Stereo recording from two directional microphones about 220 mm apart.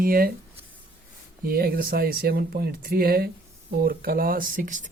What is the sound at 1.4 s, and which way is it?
Speech, 40° right (ahead or behind).